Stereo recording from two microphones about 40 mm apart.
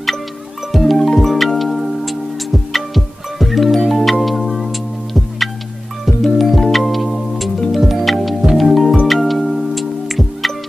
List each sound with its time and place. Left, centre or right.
0.7 s music: centre